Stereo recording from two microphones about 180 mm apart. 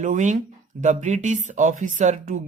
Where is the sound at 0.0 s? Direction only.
45° right (ahead or behind).